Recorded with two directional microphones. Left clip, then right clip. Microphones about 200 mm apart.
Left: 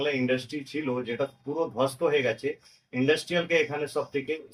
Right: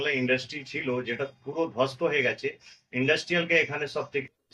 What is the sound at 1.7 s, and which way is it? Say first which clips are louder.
Speech: left 1 dB; 15° right (ahead or behind).